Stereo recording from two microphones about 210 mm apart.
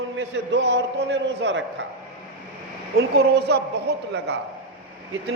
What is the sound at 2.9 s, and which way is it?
A man's voice, 50° right (ahead or behind).